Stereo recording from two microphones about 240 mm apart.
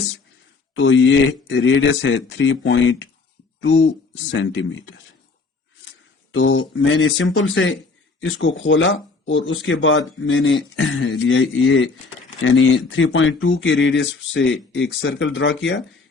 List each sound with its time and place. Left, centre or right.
0.7 s speech: left
6.3 s speech: left